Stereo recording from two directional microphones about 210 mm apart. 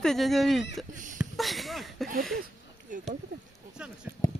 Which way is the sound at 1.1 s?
Centre (ahead or behind).